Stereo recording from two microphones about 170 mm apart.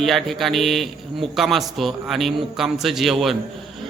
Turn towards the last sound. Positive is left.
turn(degrees=0)  # may be behind; listen again after turning